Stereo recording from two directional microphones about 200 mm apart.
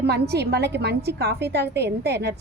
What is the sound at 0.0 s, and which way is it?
A woman's voice, 55° right (ahead or behind).